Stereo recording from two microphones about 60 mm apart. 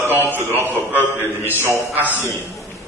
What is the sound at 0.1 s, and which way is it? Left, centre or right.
A man's voice, right.